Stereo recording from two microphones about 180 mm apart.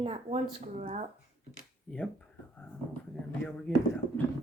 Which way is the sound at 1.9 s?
10° left (ahead or behind).